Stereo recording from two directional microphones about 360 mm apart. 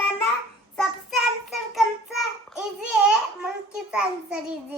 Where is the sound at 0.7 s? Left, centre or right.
Centre.